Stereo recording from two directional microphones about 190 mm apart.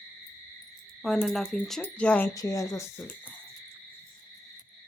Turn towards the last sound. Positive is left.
turn(degrees=15)  # may be behind; listen again after turning